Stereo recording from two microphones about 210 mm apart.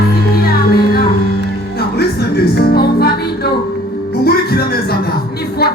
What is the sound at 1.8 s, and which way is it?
Music, 50° left (ahead or behind).